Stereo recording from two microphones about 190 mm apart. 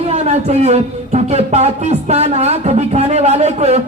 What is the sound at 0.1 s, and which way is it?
Speech, 35° right (ahead or behind).